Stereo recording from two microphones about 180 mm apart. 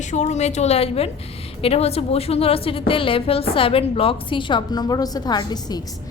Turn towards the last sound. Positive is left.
turn(degrees=20)  # may be behind; listen again after turning